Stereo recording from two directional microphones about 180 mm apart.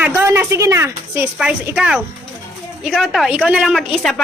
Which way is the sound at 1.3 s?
5° right (ahead or behind).